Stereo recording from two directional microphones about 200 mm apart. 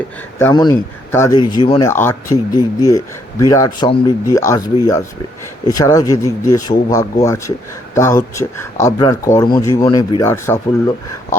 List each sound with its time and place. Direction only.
0.3 s speech: 15° left (ahead or behind)
1.8 s speech: 10° left (ahead or behind)